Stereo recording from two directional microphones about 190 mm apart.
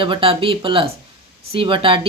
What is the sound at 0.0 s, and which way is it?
Speech, 25° right (ahead or behind).